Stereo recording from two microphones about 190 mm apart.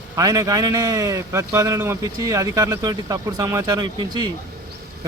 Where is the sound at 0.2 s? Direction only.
20° right (ahead or behind).